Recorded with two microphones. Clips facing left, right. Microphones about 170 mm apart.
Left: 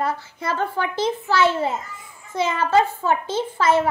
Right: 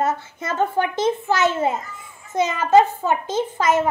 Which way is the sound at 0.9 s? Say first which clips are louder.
Right 1 dB; 25° right (ahead or behind).